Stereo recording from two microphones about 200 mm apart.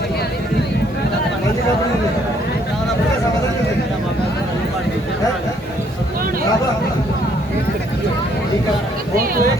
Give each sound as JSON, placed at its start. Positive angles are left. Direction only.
{"t": 9.1, "sound": "speech", "side_deg": -45}